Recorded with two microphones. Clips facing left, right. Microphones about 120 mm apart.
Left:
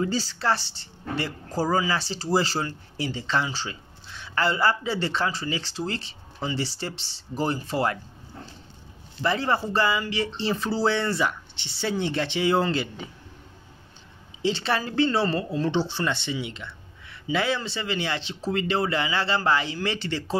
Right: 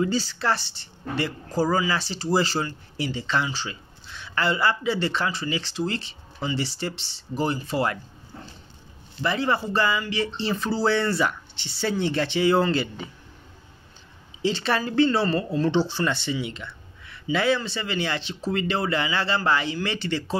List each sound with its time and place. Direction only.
0.0 s speech: 35° left (ahead or behind)
9.2 s speech: 35° left (ahead or behind); by 12.8 s 20° left (ahead or behind)
14.4 s speech: 25° left (ahead or behind)